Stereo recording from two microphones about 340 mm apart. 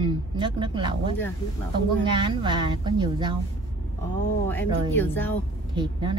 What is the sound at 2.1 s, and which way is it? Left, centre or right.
A woman's voice, centre.